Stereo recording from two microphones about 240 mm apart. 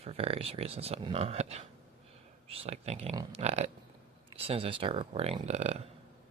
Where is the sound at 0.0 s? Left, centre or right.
Right.